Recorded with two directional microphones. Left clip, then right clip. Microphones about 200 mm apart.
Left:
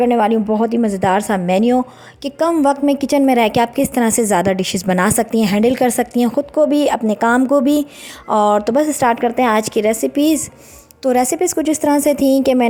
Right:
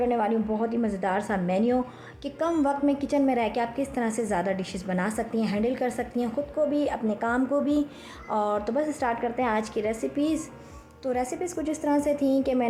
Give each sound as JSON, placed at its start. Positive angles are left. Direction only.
{"t": 0.0, "sound": "a woman's voice", "side_deg": 45}